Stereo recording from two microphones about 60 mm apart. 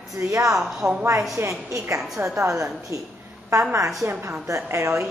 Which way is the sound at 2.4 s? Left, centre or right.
Right.